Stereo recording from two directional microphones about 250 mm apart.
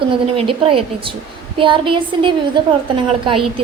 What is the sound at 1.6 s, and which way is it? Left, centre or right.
A woman's voice, centre.